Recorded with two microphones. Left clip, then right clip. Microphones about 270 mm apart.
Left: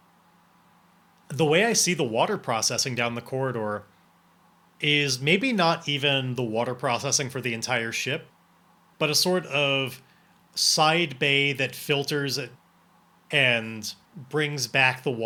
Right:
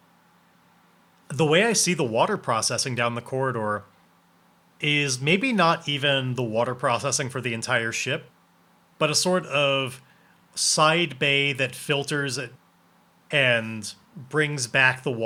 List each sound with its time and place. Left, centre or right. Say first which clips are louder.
1.3 s speech: right 1 dB; centre